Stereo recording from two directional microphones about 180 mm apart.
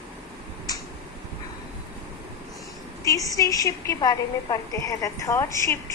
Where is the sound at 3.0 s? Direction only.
20° left (ahead or behind).